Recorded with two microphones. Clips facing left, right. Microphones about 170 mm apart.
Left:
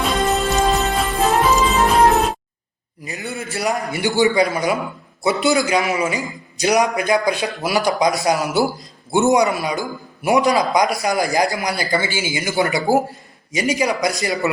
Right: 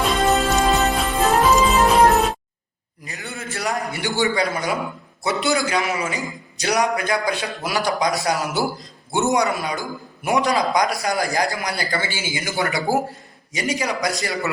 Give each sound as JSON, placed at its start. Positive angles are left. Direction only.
{"t": 0.0, "sound": "music", "side_deg": 0}
{"t": 3.0, "sound": "a sound", "side_deg": 10}
{"t": 4.2, "sound": "a man's voice", "side_deg": 15}